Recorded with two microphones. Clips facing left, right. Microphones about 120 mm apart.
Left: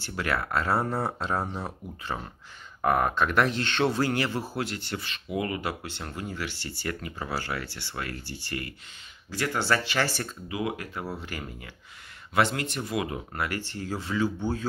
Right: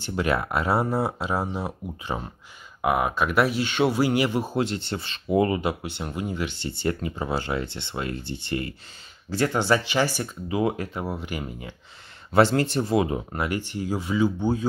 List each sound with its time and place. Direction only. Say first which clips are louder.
0.0 s speech: right 5 dB; 20° right (ahead or behind)
10.5 s speech: right 7 dB; 30° right (ahead or behind)
11.1 s speech: right 5 dB; 15° right (ahead or behind)
12.3 s speech: right 7 dB; 30° right (ahead or behind); by 14.7 s 15° right (ahead or behind)